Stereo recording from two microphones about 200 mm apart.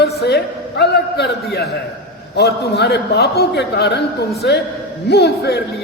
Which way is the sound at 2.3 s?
55° left (ahead or behind).